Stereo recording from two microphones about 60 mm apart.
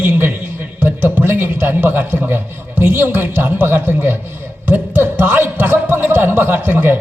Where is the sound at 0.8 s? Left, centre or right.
Right.